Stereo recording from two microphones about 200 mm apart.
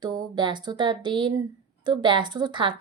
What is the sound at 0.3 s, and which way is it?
Speech, 20° right (ahead or behind).